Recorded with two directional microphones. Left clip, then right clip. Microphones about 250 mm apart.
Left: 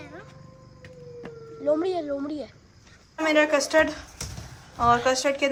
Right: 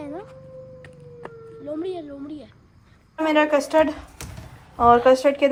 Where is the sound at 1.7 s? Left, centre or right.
Left.